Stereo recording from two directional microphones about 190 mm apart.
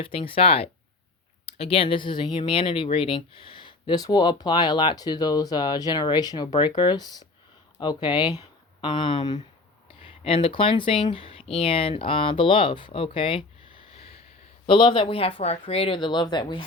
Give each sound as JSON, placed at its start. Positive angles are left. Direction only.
{"t": 0.0, "sound": "speech", "side_deg": 30}